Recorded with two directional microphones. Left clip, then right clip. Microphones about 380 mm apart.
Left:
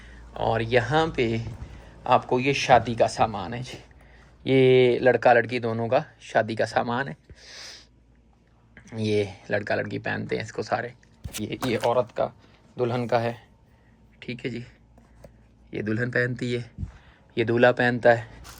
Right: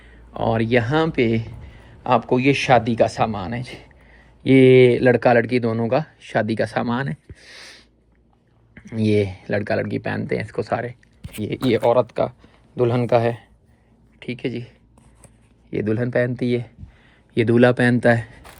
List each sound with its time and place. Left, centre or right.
0.0 s speech: centre
16.1 s speech: centre
17.3 s speech: centre